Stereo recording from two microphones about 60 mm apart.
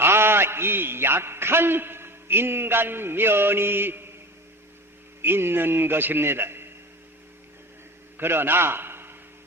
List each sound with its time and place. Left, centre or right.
0.0 s a man's voice: right
5.2 s a man's voice: right
8.2 s a man's voice: right